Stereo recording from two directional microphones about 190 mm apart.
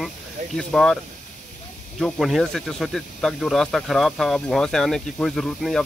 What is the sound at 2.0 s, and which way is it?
Speech, centre (ahead or behind).